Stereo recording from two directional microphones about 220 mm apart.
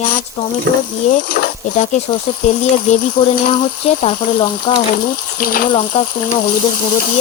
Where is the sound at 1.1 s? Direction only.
35° left (ahead or behind).